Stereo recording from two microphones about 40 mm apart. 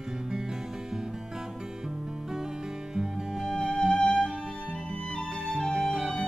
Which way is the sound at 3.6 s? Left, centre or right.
Centre.